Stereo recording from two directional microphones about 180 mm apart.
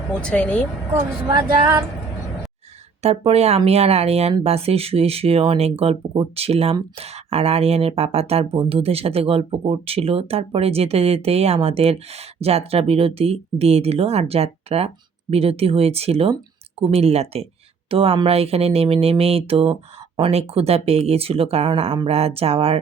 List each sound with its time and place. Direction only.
0.1 s speech: 5° left (ahead or behind)
0.9 s speech: 15° right (ahead or behind)
3.0 s speech: 35° right (ahead or behind)